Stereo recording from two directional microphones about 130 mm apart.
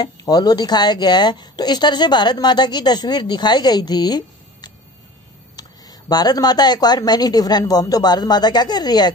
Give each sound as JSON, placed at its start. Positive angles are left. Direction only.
{"t": 0.0, "sound": "a woman's voice", "side_deg": 30}